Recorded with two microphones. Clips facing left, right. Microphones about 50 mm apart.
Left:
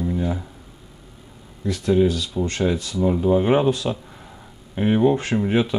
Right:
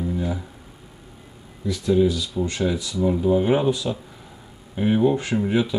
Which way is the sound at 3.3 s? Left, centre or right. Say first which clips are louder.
Left 2 dB; left.